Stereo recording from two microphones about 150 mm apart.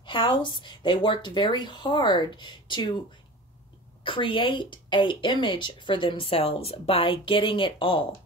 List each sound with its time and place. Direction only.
0.0 s speech: 35° left (ahead or behind)
4.0 s speech: 35° left (ahead or behind)